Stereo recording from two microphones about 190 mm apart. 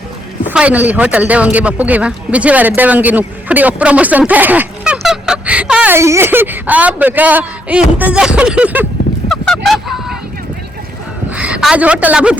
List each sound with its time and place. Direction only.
0.4 s speech: 5° right (ahead or behind)
9.3 s a sound: centre (ahead or behind)
11.3 s a woman's voice: 5° right (ahead or behind)